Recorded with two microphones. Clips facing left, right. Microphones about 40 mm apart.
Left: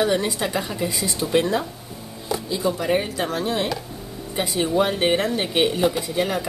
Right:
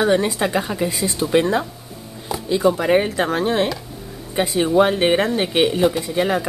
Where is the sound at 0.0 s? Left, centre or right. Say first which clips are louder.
Right 4 dB; centre.